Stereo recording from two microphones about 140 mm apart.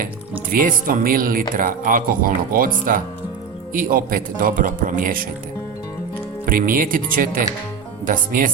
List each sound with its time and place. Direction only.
0.5 s speech: 80° right
6.4 s speech: 85° right